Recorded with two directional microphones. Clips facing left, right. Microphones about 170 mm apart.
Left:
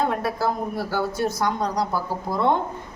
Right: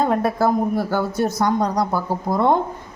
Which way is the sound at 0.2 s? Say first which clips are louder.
Right 6 dB; 50° right (ahead or behind).